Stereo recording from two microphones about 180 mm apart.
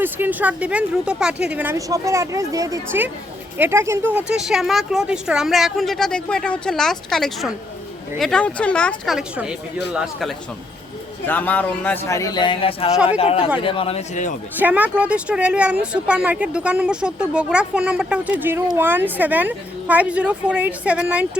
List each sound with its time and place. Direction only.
0.0 s a woman's voice: 10° right (ahead or behind)
11.3 s a man's voice: 10° left (ahead or behind); by 14.3 s 40° left (ahead or behind)
14.6 s speech: 10° right (ahead or behind)